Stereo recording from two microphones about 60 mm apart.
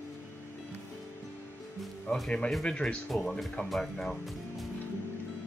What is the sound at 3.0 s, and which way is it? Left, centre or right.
Speech, centre.